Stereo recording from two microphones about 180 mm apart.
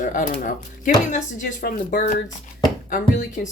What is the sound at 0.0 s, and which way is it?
Speech, 45° left (ahead or behind).